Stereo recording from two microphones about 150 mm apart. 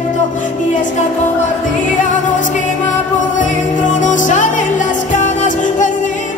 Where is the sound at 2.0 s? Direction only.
60° left (ahead or behind).